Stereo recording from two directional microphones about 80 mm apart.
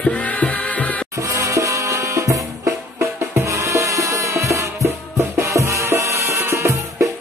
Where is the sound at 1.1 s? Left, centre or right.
Right.